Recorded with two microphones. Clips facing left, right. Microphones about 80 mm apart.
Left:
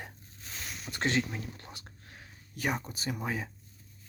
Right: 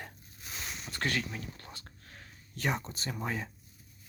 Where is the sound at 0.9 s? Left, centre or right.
Left.